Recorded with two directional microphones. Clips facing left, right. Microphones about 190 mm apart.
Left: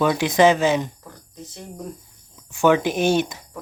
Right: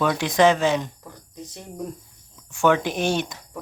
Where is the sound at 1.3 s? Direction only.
10° right (ahead or behind).